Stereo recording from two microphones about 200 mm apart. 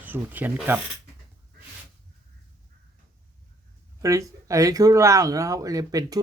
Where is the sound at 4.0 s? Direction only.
15° right (ahead or behind).